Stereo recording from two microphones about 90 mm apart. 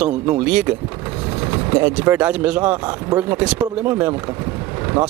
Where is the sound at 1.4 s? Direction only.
25° right (ahead or behind).